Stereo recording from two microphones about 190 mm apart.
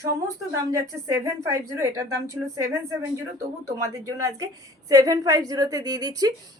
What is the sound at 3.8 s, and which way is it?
A woman's voice, 15° right (ahead or behind).